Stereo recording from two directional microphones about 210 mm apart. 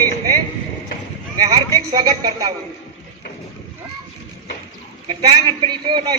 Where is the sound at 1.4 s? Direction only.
20° right (ahead or behind).